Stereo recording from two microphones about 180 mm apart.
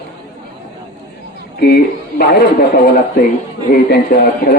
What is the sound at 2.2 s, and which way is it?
Speech, 60° left (ahead or behind).